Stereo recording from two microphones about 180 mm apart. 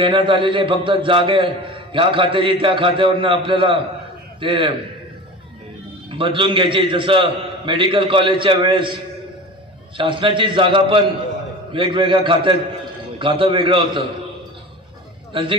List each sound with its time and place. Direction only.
0.0 s a man's voice: 30° right (ahead or behind)
6.0 s a man's voice: 30° right (ahead or behind)
15.3 s a man's voice: 30° right (ahead or behind)